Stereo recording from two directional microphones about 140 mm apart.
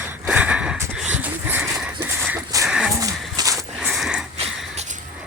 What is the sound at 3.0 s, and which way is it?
Horse, 25° right (ahead or behind).